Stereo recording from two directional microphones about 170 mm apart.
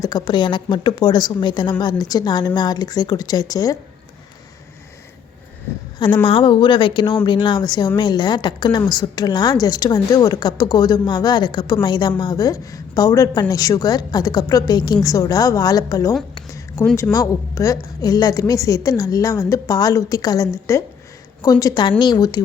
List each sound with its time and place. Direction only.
0.0 s a woman's voice: 25° left (ahead or behind)
6.2 s a woman's voice: 30° left (ahead or behind)
16.3 s a sound: 20° left (ahead or behind)
16.8 s a woman's voice: 15° left (ahead or behind)